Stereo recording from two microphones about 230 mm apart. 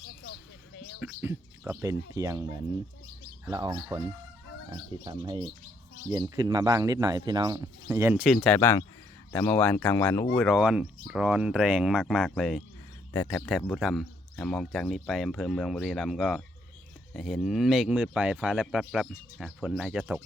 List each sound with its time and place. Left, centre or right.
1.0 s speech: centre